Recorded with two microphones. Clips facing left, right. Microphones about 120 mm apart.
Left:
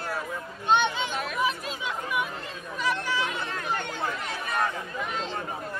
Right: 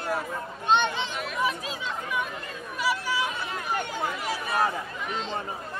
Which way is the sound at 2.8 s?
10° right (ahead or behind).